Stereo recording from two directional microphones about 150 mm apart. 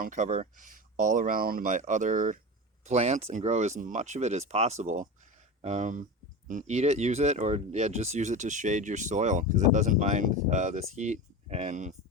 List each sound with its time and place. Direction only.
0.0 s speech: 55° right (ahead or behind)